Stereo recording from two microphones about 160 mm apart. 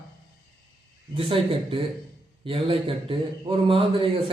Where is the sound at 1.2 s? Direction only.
35° right (ahead or behind).